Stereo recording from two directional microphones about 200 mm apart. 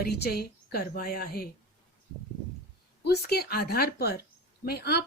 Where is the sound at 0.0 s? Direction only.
50° left (ahead or behind).